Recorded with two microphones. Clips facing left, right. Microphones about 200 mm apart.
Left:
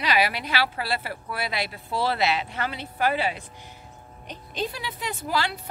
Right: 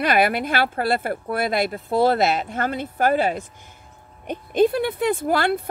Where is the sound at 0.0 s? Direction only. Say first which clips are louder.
Right 6 dB; 50° right (ahead or behind).